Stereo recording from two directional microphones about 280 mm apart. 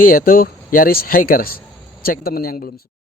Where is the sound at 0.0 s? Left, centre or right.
Left.